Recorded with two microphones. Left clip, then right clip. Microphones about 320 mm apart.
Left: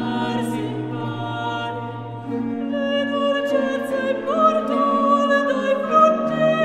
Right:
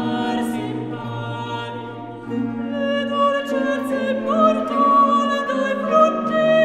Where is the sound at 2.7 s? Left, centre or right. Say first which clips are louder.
Even; centre.